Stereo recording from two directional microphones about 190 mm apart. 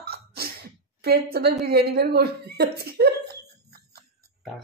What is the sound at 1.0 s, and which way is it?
A woman's voice, 55° right (ahead or behind).